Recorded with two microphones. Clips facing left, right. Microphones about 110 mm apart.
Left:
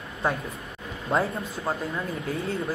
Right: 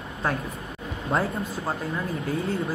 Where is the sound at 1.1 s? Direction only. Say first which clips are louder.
Left 1 dB; centre (ahead or behind).